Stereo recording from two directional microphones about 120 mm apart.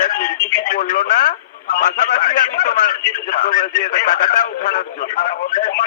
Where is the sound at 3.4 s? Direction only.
90° left.